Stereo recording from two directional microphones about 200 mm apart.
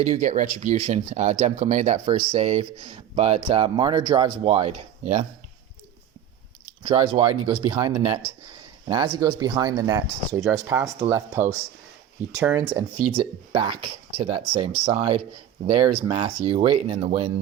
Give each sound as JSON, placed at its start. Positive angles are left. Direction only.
{"t": 0.0, "sound": "speech", "side_deg": -40}
{"t": 6.8, "sound": "speech", "side_deg": -25}
{"t": 13.1, "sound": "speech", "side_deg": -25}